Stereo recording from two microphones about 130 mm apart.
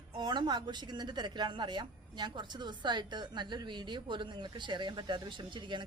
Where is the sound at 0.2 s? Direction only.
35° right (ahead or behind).